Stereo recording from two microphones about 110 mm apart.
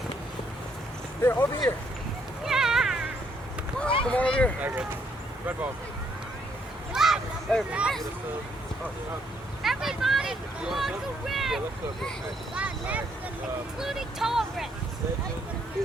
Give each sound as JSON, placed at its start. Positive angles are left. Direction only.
{"t": 1.2, "sound": "speech", "side_deg": 20}
{"t": 2.4, "sound": "a sound", "side_deg": -5}
{"t": 4.0, "sound": "speech", "side_deg": 10}
{"t": 4.6, "sound": "speech", "side_deg": -15}
{"t": 6.9, "sound": "a sound", "side_deg": -5}
{"t": 9.6, "sound": "speech", "side_deg": 0}
{"t": 12.5, "sound": "speech", "side_deg": -10}